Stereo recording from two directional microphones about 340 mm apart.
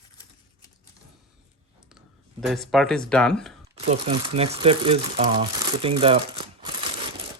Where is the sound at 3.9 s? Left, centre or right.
Centre.